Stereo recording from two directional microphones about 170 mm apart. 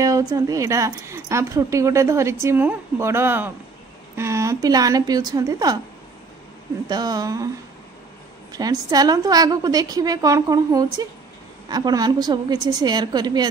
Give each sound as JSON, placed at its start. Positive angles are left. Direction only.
{"t": 0.0, "sound": "a woman's voice", "side_deg": -20}
{"t": 6.9, "sound": "a woman's voice", "side_deg": -25}
{"t": 8.5, "sound": "a woman's voice", "side_deg": -25}